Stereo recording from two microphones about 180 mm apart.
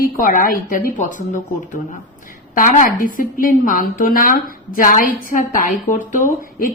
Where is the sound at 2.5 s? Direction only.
50° left (ahead or behind).